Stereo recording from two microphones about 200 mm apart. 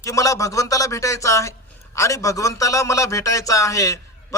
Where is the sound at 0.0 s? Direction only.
15° left (ahead or behind).